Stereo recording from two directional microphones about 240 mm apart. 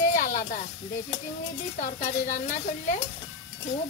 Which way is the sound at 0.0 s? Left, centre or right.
Left.